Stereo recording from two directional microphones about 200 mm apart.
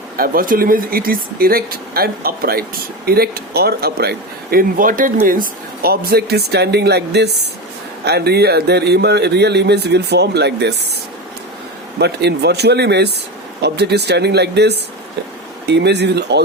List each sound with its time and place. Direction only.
0.2 s speech: 45° right (ahead or behind)
11.9 s speech: 55° right (ahead or behind)